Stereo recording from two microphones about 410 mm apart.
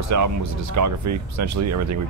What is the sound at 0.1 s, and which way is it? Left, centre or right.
Speech, right.